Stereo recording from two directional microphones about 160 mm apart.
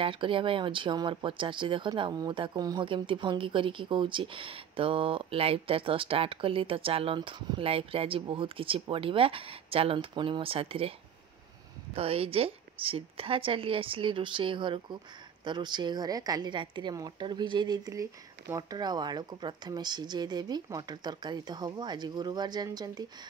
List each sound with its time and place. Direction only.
0.0 s speech: 35° right (ahead or behind)